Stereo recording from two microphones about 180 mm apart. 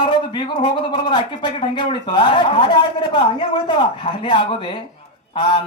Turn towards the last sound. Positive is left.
turn(degrees=25)  # may be behind; listen again after turning